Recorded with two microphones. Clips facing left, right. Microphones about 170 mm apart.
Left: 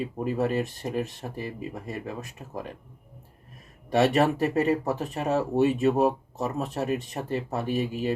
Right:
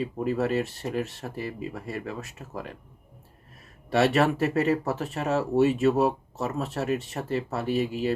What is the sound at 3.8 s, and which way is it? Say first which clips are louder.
Speech: even; 15° left (ahead or behind).